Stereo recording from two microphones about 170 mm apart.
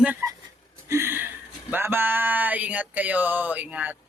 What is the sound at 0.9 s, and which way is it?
Speech, 15° right (ahead or behind).